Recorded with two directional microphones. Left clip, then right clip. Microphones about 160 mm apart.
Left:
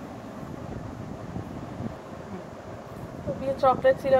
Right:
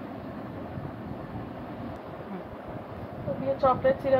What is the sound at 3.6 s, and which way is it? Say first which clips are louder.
Speech: left 2 dB; 90° left.